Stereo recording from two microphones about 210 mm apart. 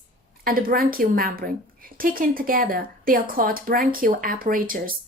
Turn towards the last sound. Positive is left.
turn(degrees=-40)  # may be behind; listen again after turning